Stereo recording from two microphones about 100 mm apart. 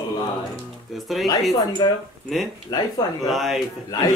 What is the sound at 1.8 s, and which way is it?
Speech, 50° left (ahead or behind).